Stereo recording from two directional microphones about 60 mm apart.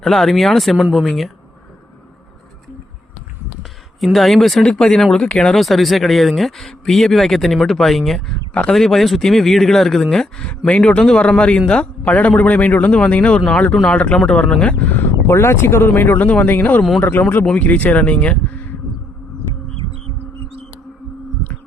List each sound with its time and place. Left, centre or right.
0.0 s speech: centre
3.6 s a sound: centre
4.6 s a man's voice: centre
5.5 s a man's voice: centre; by 15.4 s left
15.4 s speech: left